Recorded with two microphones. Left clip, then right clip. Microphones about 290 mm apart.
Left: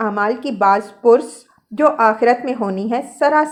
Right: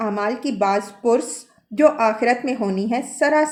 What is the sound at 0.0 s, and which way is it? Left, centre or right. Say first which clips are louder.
A woman's voice: left 4 dB; centre.